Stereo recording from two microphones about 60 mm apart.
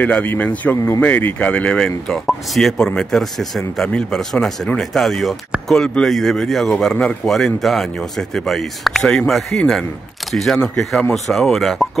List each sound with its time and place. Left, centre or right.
0.0 s speech: left
2.2 s speech: centre